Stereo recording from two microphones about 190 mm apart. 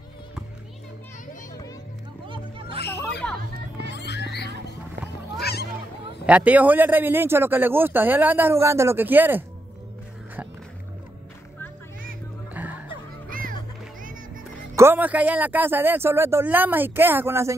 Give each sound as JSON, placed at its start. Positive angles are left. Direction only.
{"t": 2.2, "sound": "music", "side_deg": -25}
{"t": 2.9, "sound": "a sound", "side_deg": 10}
{"t": 3.9, "sound": "music", "side_deg": 65}
{"t": 5.4, "sound": "a sound", "side_deg": 55}
{"t": 6.2, "sound": "a man's voice", "side_deg": -5}
{"t": 12.6, "sound": "music", "side_deg": -10}
{"t": 13.3, "sound": "music", "side_deg": -45}
{"t": 14.8, "sound": "a man's voice", "side_deg": -10}